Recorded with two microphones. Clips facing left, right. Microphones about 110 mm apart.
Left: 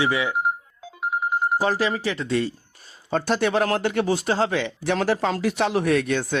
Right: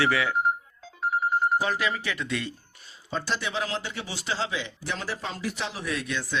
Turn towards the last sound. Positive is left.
turn(degrees=55)  # may be behind; listen again after turning